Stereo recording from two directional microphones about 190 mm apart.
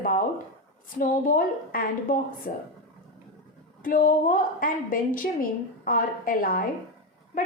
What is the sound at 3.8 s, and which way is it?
A woman's voice, 45° left (ahead or behind).